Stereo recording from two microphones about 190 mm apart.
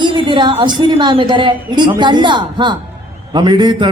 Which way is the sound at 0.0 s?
25° right (ahead or behind).